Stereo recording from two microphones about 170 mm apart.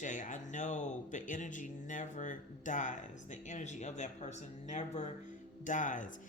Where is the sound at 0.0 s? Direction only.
45° left (ahead or behind).